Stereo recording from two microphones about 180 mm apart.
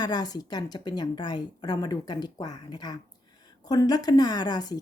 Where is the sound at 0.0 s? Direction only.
20° left (ahead or behind).